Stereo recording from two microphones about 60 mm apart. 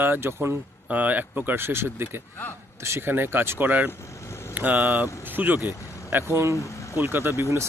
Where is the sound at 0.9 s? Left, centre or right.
Right.